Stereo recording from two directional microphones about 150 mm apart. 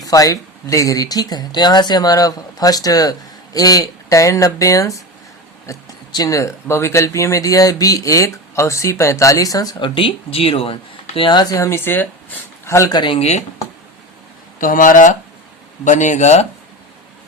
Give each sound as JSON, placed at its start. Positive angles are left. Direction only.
{"t": 0.0, "sound": "speech", "side_deg": 25}
{"t": 14.6, "sound": "speech", "side_deg": 65}